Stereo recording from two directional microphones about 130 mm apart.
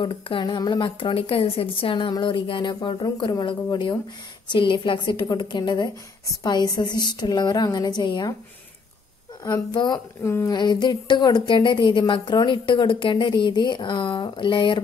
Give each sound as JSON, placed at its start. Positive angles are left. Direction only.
{"t": 0.0, "sound": "speech", "side_deg": 40}
{"t": 9.4, "sound": "speech", "side_deg": 30}
{"t": 10.2, "sound": "a sound", "side_deg": 20}
{"t": 10.5, "sound": "speech", "side_deg": 35}